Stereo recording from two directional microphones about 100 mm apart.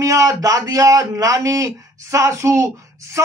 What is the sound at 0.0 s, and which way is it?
A man's voice, 35° right (ahead or behind).